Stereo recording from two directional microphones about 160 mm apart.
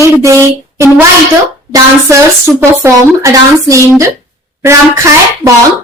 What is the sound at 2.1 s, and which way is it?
A woman's voice, 15° right (ahead or behind).